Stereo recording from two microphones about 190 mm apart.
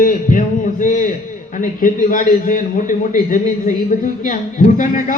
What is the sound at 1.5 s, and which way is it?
A man's voice, 45° left (ahead or behind).